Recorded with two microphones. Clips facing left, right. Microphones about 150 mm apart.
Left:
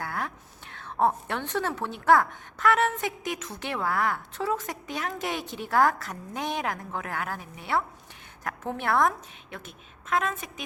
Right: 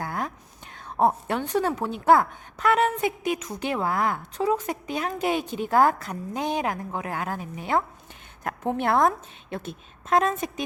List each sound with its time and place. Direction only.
0.0 s whispering: 20° right (ahead or behind)
0.8 s a woman's voice: 15° right (ahead or behind); by 10.5 s 35° right (ahead or behind)